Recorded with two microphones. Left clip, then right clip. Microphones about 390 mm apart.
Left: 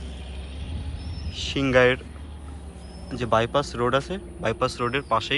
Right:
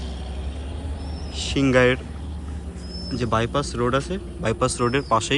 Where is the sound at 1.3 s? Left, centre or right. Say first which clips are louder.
Right 2 dB; centre.